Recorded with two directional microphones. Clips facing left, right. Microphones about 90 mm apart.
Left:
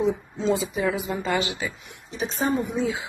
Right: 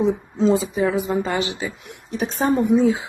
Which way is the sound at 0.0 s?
40° right (ahead or behind).